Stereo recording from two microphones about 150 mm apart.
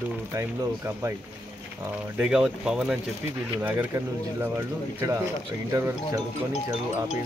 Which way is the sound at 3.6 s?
15° right (ahead or behind).